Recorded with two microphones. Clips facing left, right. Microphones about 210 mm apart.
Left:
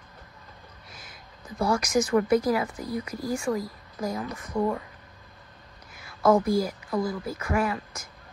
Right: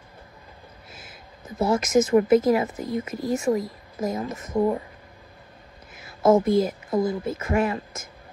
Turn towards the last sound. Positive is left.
turn(degrees=-25)  # may be behind; listen again after turning